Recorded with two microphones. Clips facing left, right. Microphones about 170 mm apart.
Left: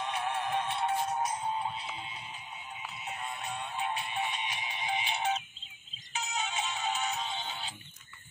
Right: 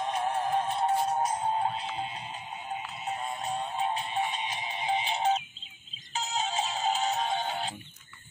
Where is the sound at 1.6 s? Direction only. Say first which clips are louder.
Right 6 dB; 50° right (ahead or behind).